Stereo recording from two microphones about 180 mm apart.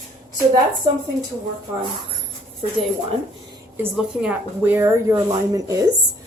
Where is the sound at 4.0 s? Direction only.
5° right (ahead or behind).